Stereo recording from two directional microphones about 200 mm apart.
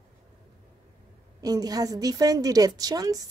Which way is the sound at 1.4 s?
20° right (ahead or behind).